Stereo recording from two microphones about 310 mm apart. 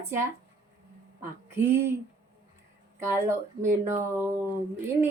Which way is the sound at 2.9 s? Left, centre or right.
Centre.